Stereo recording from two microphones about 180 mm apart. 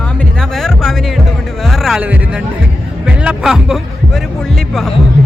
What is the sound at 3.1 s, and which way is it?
Speech, 5° right (ahead or behind).